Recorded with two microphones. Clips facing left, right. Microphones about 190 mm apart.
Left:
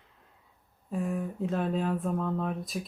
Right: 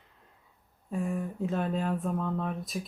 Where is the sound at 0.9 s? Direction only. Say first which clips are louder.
Even; centre (ahead or behind).